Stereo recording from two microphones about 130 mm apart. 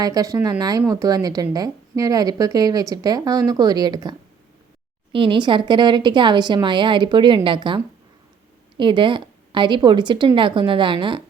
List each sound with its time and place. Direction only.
0.0 s speech: 25° right (ahead or behind)
5.1 s speech: 40° right (ahead or behind)
8.8 s speech: 40° right (ahead or behind)